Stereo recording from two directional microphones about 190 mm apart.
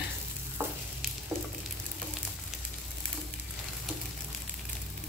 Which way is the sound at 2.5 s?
Centre (ahead or behind).